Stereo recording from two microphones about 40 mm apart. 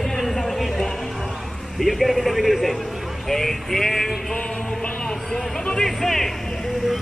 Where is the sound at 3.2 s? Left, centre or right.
Centre.